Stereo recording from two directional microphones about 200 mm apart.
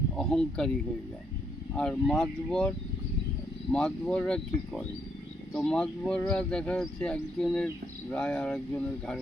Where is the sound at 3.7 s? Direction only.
5° left (ahead or behind).